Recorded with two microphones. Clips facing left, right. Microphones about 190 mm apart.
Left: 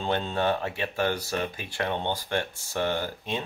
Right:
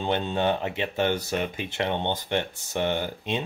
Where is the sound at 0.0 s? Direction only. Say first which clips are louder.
Right 2 dB; 20° right (ahead or behind).